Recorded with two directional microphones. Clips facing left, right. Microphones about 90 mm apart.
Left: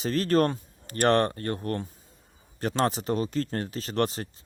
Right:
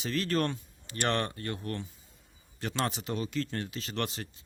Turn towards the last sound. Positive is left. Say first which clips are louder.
# left 8 dB
turn(degrees=40)  # may be behind; listen again after turning